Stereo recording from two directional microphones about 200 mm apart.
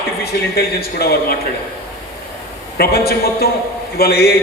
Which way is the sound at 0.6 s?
50° left (ahead or behind).